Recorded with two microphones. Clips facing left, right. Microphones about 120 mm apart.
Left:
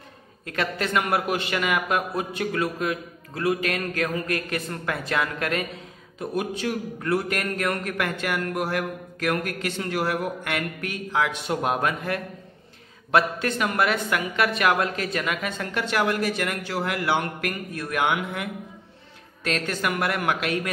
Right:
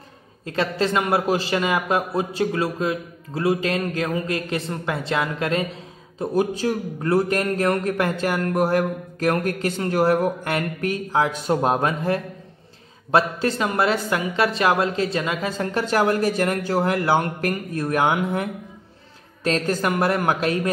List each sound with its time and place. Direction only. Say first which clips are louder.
0.5 s a man's voice: right 4 dB; 25° right (ahead or behind)